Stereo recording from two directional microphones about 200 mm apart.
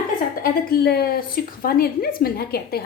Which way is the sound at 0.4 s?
50° left (ahead or behind).